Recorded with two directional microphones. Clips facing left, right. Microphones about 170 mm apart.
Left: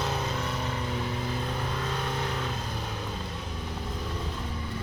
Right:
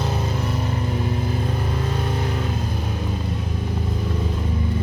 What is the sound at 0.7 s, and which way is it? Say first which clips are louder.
Vehicle: right 7 dB; 40° right (ahead or behind).